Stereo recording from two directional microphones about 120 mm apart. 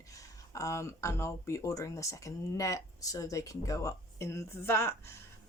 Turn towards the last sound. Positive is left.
turn(degrees=20)  # may be behind; listen again after turning